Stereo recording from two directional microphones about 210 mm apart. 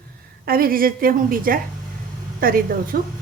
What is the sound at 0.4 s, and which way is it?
A woman's voice, 45° right (ahead or behind).